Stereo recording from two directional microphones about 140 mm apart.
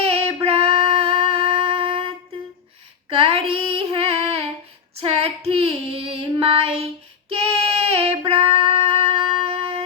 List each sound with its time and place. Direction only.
0.0 s female singing: 45° right (ahead or behind)
0.4 s music: 45° right (ahead or behind)
3.1 s female singing: 40° right (ahead or behind)